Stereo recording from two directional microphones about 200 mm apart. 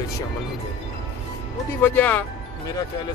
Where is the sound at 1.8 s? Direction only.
10° left (ahead or behind).